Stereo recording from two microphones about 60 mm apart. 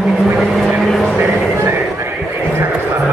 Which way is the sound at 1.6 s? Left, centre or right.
Right.